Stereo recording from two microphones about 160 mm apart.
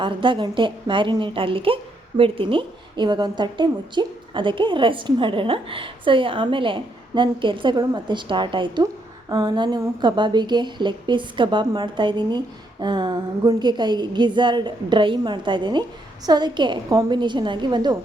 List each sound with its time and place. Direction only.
0.0 s a woman's voice: 30° right (ahead or behind)